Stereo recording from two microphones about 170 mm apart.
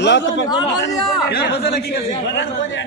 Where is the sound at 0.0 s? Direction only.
90° left.